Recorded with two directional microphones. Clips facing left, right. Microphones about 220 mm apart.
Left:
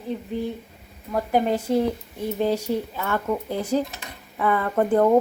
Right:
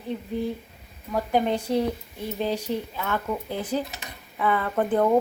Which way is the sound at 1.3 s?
5° left (ahead or behind).